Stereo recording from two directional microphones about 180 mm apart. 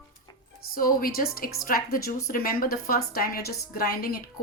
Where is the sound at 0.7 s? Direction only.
50° left (ahead or behind).